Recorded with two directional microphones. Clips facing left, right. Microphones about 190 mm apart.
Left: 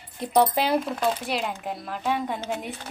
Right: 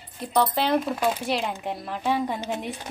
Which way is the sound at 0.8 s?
Centre (ahead or behind).